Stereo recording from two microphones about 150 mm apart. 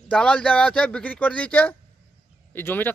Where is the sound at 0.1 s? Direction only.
10° left (ahead or behind).